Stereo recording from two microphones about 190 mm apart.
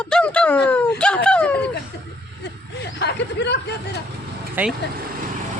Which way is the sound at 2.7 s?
65° left (ahead or behind).